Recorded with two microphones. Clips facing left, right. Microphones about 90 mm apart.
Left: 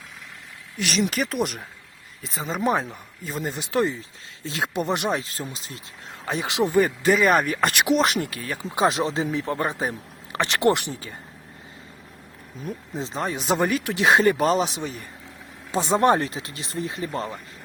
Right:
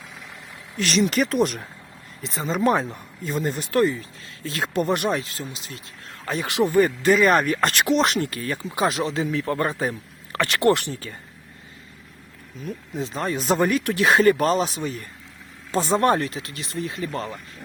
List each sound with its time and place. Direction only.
1.1 s speech: centre (ahead or behind)
5.2 s speech: 30° left (ahead or behind)
6.2 s speech: 15° left (ahead or behind)
8.7 s a man's voice: 30° left (ahead or behind)
12.6 s speech: 30° left (ahead or behind)
13.1 s speech: 10° left (ahead or behind)
16.0 s a man's voice: 25° left (ahead or behind)